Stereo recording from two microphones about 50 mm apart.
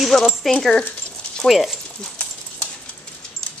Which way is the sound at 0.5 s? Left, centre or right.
Centre.